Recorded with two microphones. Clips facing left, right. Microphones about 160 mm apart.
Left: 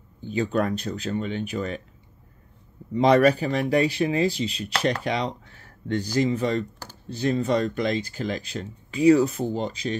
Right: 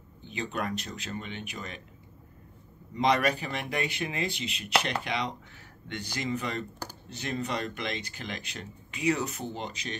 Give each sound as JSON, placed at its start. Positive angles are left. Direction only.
{"t": 0.3, "sound": "speech", "side_deg": 35}
{"t": 2.9, "sound": "speech", "side_deg": 35}